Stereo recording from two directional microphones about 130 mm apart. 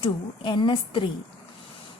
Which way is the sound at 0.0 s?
35° left (ahead or behind).